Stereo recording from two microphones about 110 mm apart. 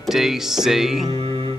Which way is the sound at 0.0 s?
5° right (ahead or behind).